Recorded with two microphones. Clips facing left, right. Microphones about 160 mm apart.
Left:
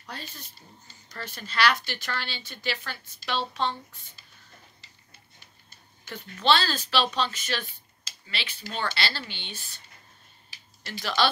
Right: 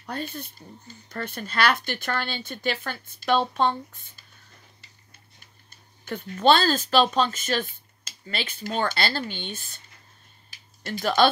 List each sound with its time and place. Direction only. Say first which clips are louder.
0.0 s speech: right 9 dB; 55° right (ahead or behind)
6.0 s speech: right 5 dB; 50° right (ahead or behind)
10.8 s speech: right 6 dB; 50° right (ahead or behind)